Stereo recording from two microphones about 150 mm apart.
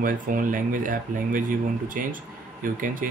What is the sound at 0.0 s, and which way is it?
Speech, 65° right (ahead or behind).